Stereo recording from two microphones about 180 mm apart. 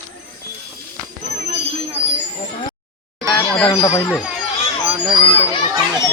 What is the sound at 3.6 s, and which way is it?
Speech, 20° left (ahead or behind).